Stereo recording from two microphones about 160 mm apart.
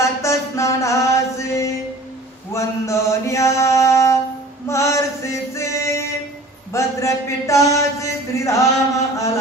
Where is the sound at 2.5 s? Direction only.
20° left (ahead or behind).